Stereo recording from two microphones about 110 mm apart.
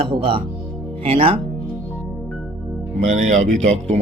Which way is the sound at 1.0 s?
60° right (ahead or behind).